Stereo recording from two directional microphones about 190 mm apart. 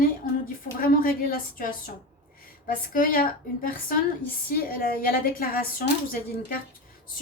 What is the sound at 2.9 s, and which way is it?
A woman's voice, 45° left (ahead or behind).